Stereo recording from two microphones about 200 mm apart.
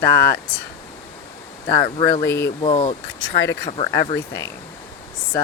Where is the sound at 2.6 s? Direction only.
30° left (ahead or behind).